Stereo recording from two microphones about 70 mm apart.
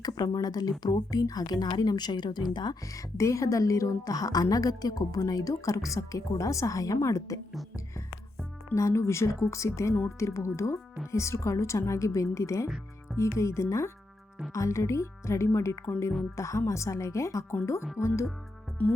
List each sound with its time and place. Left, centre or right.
0.0 s speech: left
2.8 s speech: left
8.9 s a woman's voice: left
18.8 s music: left